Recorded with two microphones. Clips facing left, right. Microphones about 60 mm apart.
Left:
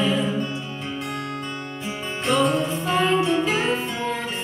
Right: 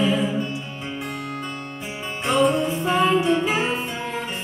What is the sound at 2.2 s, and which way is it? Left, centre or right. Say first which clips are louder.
Music: right 1 dB; centre.